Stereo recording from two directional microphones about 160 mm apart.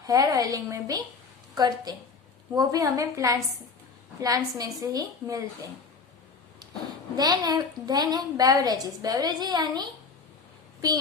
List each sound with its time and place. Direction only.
0.0 s a woman's voice: 25° right (ahead or behind)
7.2 s a woman's voice: 25° right (ahead or behind)